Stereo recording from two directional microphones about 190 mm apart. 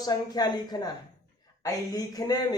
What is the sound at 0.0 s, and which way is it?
Speech, 20° left (ahead or behind).